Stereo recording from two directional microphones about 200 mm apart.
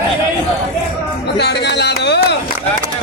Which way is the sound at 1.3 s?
60° left (ahead or behind).